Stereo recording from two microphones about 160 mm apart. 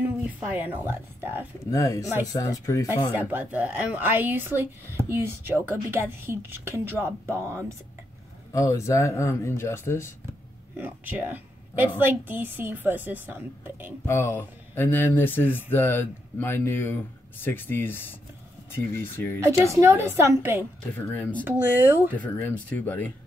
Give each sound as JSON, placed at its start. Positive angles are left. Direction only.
{"t": 0.2, "sound": "speech", "side_deg": -10}
{"t": 1.7, "sound": "speech", "side_deg": 20}
{"t": 3.1, "sound": "speech", "side_deg": -10}
{"t": 8.5, "sound": "speech", "side_deg": 20}
{"t": 10.8, "sound": "speech", "side_deg": -10}
{"t": 14.0, "sound": "speech", "side_deg": 15}
{"t": 19.8, "sound": "speech", "side_deg": -15}
{"t": 21.1, "sound": "speech", "side_deg": 10}
{"t": 21.5, "sound": "speech", "side_deg": -15}
{"t": 22.1, "sound": "speech", "side_deg": 10}